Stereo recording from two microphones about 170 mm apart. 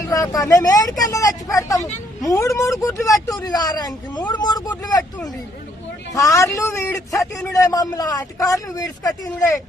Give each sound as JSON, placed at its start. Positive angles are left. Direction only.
{"t": 0.1, "sound": "a man's voice", "side_deg": 20}